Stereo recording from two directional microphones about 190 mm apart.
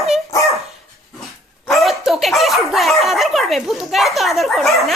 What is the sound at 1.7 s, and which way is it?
Speech, centre (ahead or behind).